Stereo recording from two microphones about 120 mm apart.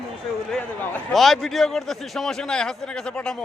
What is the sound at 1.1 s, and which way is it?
A man's voice, centre (ahead or behind).